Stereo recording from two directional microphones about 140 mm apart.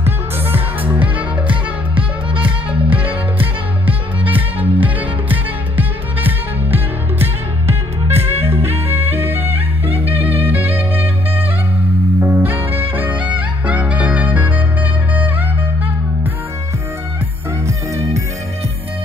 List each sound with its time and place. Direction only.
0.0 s music: 15° right (ahead or behind)
1.5 s music: 40° right (ahead or behind)
4.6 s music: 10° right (ahead or behind)
9.5 s music: 45° right (ahead or behind)
10.4 s music: 15° right (ahead or behind)
17.6 s music: 20° right (ahead or behind)